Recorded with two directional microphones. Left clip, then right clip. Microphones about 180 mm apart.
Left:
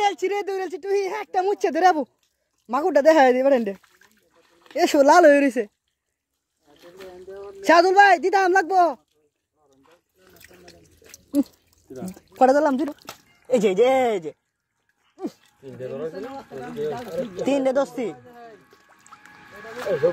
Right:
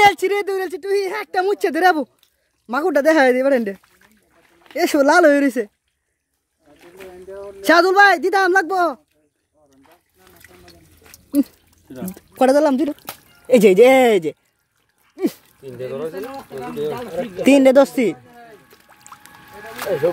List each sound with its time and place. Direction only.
0.0 s a sound: 30° right (ahead or behind)
0.3 s a woman's voice: 10° right (ahead or behind)
6.8 s a sound: centre (ahead or behind)
7.6 s a woman's voice: 5° right (ahead or behind)
10.4 s water: 20° left (ahead or behind)
12.2 s speech: 25° right (ahead or behind)
12.9 s speech: 45° right (ahead or behind)